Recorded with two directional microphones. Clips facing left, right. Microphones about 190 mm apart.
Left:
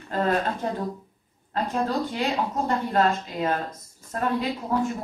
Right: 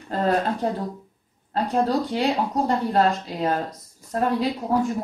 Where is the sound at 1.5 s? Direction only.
35° right (ahead or behind).